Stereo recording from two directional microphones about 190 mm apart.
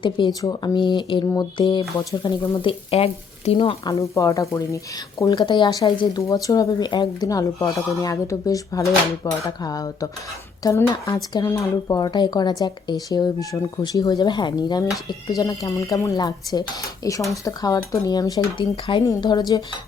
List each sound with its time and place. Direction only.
0.0 s speech: 20° left (ahead or behind)
2.6 s speech: 30° left (ahead or behind)
4.0 s speech: 15° left (ahead or behind)